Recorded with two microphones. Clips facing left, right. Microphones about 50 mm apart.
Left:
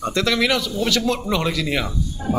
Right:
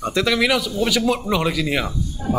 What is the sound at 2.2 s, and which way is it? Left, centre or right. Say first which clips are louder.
Speech: even; left.